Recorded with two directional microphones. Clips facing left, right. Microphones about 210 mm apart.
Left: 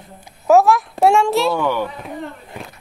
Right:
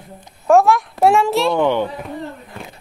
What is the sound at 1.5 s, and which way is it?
Speech, 20° right (ahead or behind).